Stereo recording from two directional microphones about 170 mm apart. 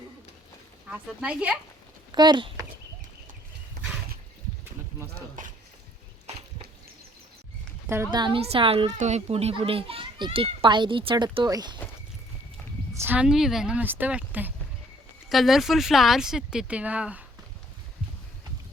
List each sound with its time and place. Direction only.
0.9 s speech: 5° right (ahead or behind)
2.1 s speech: 25° right (ahead or behind)
7.9 s speech: 15° right (ahead or behind)
8.2 s a child's voice: 35° right (ahead or behind)
8.9 s a child's voice: 45° right (ahead or behind); by 11.8 s 25° right (ahead or behind)
12.9 s speech: 15° right (ahead or behind)